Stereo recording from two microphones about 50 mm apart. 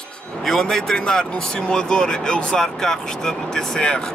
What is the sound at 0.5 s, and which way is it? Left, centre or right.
A man's voice, centre.